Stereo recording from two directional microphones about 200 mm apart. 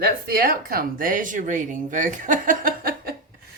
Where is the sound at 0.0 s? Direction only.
50° right (ahead or behind).